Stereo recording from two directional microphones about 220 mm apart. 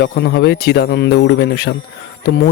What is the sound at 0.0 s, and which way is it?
Speech, 50° left (ahead or behind).